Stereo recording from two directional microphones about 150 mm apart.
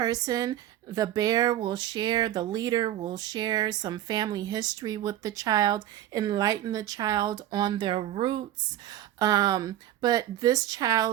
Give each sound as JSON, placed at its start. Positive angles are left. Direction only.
{"t": 0.0, "sound": "speech", "side_deg": -25}
{"t": 8.9, "sound": "speech", "side_deg": -25}